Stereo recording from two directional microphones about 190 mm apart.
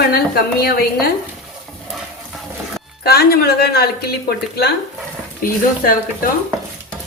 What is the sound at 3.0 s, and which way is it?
Speech, 55° left (ahead or behind).